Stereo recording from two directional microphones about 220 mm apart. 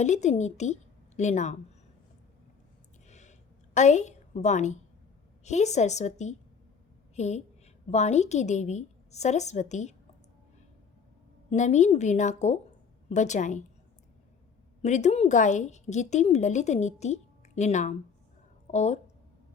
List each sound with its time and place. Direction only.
0.0 s a woman's voice: 30° left (ahead or behind)
3.1 s a sound: 30° left (ahead or behind)
3.8 s a woman's voice: 30° left (ahead or behind)
11.5 s a woman's voice: 30° left (ahead or behind)
14.8 s a woman's voice: 30° left (ahead or behind)